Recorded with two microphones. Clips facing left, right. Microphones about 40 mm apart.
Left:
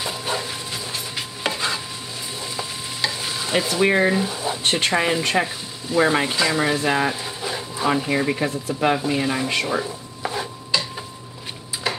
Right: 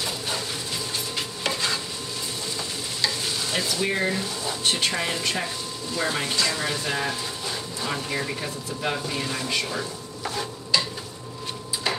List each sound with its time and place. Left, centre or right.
0.0 s a sound: centre
1.1 s stir: centre
3.8 s speech: left
4.1 s speech: centre
4.6 s speech: left
5.9 s speech: left
7.4 s a sound: centre
8.0 s speech: centre
8.4 s speech: left
9.0 s speech: centre
9.5 s speech: left
9.8 s stir: centre